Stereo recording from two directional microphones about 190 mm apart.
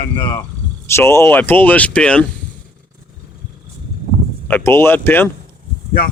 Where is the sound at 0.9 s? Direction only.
15° left (ahead or behind).